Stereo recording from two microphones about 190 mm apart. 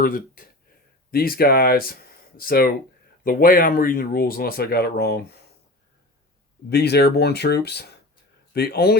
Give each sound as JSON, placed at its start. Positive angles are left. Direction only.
{"t": 0.0, "sound": "speech", "side_deg": 45}
{"t": 6.7, "sound": "speech", "side_deg": 60}